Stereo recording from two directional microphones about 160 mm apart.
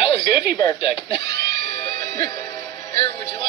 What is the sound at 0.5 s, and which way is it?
Speech, 20° left (ahead or behind).